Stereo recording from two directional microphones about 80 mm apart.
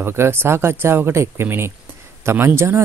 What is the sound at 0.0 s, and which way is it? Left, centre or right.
Speech, right.